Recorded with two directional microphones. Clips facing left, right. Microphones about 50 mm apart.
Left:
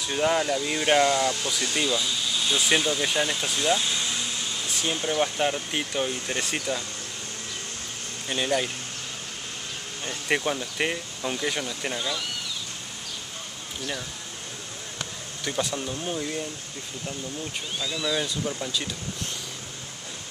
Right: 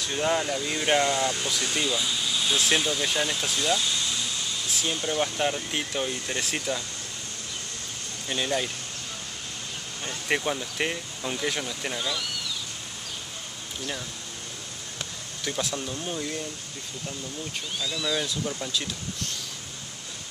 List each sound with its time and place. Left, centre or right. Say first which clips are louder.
0.0 s speech: left 2 dB; centre
3.7 s speech: left 1 dB; centre
8.3 s speech: left 2 dB; centre
10.0 s speech: left 1 dB; centre
15.4 s speech: left 2 dB; centre
17.7 s speech: left 1 dB; centre